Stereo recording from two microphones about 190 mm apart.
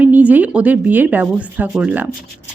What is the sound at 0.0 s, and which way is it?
A woman's voice, 10° right (ahead or behind).